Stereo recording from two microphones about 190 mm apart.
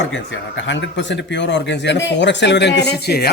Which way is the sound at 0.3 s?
75° left (ahead or behind).